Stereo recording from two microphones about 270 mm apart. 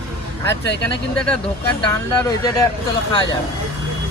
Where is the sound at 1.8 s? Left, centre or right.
Centre.